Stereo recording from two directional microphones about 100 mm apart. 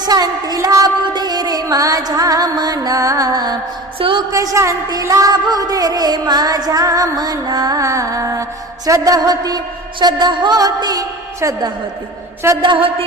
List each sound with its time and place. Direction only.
0.0 s music: 40° right (ahead or behind)
4.0 s a woman's voice: 55° right (ahead or behind)
4.3 s music: 30° right (ahead or behind)
12.6 s a sound: 60° right (ahead or behind)